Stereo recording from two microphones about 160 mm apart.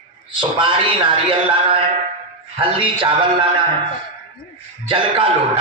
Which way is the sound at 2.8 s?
30° right (ahead or behind).